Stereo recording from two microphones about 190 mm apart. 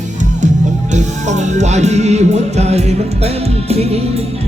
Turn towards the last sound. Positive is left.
turn(degrees=-35)  # may be behind; listen again after turning